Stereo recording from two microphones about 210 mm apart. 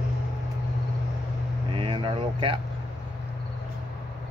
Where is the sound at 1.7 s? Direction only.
25° right (ahead or behind).